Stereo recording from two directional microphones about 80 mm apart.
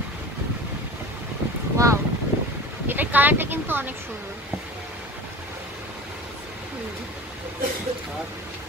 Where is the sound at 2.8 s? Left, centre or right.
Right.